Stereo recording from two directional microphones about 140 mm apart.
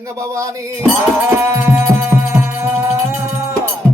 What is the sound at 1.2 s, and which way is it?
Music, 15° right (ahead or behind).